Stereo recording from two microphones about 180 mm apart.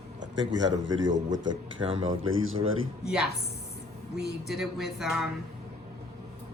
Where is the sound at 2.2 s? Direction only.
90° right.